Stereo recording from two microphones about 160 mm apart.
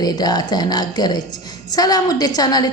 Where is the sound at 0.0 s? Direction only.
25° left (ahead or behind).